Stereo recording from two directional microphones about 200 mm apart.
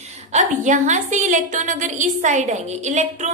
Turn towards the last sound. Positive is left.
turn(degrees=-35)  # may be behind; listen again after turning